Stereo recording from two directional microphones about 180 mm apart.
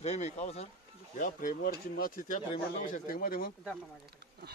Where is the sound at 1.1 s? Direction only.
50° left (ahead or behind).